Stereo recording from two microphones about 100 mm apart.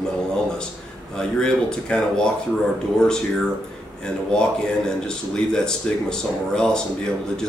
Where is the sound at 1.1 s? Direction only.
5° left (ahead or behind).